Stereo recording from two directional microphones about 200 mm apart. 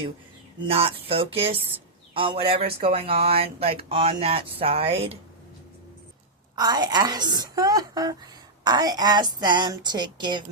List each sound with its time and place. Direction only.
0.6 s a woman's voice: 30° right (ahead or behind)
6.6 s a woman's voice: 20° right (ahead or behind)